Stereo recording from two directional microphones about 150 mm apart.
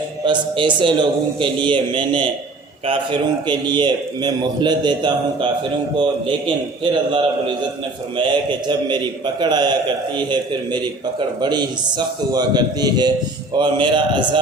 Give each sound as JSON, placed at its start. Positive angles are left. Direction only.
{"t": 0.3, "sound": "a man's voice", "side_deg": -35}
{"t": 7.1, "sound": "a man's voice", "side_deg": -35}